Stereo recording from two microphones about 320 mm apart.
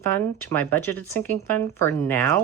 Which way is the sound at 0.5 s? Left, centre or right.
Centre.